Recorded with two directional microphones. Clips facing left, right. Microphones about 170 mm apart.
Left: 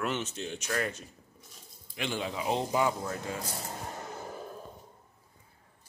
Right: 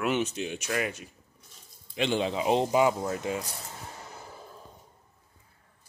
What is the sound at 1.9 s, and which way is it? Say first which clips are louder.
Speech: right 7 dB; 25° right (ahead or behind).